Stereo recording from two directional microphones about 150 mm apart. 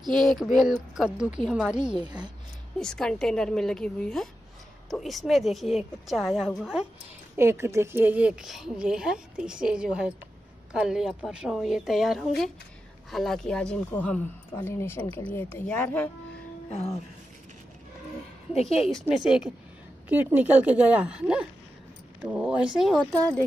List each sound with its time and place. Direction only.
0.0 s a woman's voice: 5° left (ahead or behind)
2.0 s a woman's voice: 30° right (ahead or behind)
2.8 s a woman's voice: 5° left (ahead or behind)
7.3 s a woman's voice: 15° right (ahead or behind); by 16.1 s 10° left (ahead or behind)
16.7 s music: 45° left (ahead or behind)
19.0 s a woman's voice: 5° right (ahead or behind)